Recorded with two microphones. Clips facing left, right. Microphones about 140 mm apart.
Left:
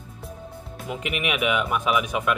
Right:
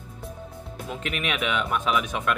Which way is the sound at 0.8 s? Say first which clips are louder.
Left 2 dB; 10° left (ahead or behind).